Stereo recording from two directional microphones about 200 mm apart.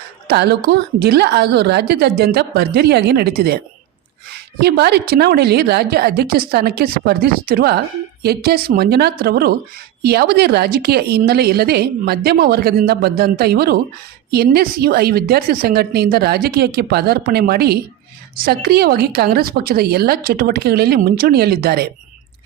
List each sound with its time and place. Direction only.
0.3 s a woman's voice: 55° right (ahead or behind)
4.6 s a woman's voice: 55° right (ahead or behind)